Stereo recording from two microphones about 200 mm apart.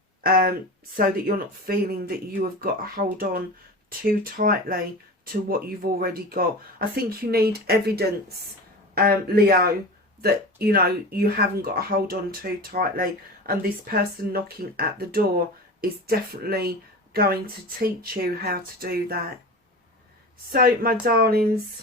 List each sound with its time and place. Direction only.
0.2 s speech: 50° right (ahead or behind)
1.6 s speech: 45° right (ahead or behind)
20.5 s speech: 45° right (ahead or behind)